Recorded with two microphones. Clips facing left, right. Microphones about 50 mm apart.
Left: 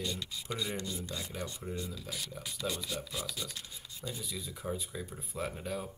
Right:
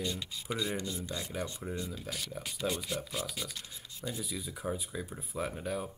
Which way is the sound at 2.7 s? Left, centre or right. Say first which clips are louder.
Right 2 dB; right.